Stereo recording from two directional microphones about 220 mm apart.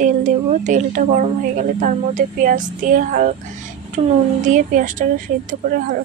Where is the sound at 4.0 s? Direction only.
25° right (ahead or behind).